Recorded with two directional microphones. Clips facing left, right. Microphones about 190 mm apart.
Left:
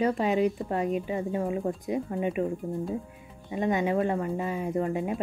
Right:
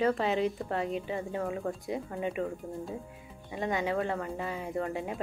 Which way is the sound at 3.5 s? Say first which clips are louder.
Left 5 dB; 20° left (ahead or behind).